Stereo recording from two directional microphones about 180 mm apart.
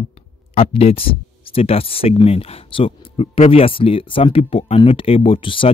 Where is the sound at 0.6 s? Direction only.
35° left (ahead or behind).